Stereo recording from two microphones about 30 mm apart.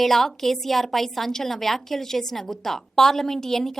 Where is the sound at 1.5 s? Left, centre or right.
Centre.